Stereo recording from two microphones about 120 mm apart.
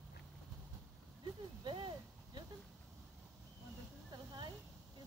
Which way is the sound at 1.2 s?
40° right (ahead or behind).